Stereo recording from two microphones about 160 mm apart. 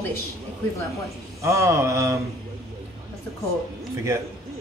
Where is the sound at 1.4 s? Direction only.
20° right (ahead or behind).